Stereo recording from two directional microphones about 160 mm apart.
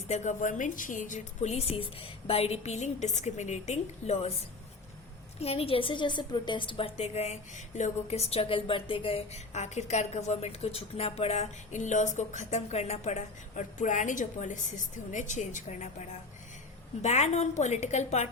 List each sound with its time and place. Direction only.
0.1 s a woman's voice: 50° left (ahead or behind)
5.4 s a woman's voice: 40° left (ahead or behind)